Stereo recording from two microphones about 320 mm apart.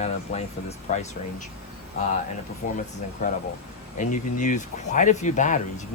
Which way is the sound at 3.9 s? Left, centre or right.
Left.